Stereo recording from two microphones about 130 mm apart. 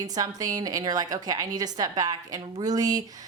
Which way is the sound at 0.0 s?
30° right (ahead or behind).